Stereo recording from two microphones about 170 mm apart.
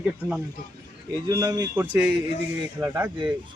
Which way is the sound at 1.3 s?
20° right (ahead or behind).